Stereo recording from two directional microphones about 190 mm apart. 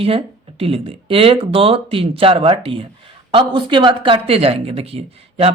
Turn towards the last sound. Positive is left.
turn(degrees=-30)  # may be behind; listen again after turning